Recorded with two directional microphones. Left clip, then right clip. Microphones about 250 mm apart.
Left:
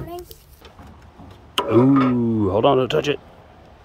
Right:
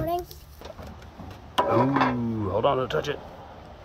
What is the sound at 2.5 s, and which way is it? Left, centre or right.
Speech, left.